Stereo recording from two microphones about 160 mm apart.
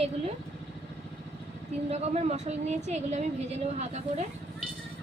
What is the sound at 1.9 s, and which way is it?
A woman's voice, 40° right (ahead or behind).